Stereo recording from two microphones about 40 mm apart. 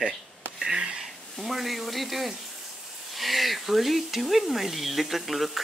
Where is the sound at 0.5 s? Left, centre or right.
Centre.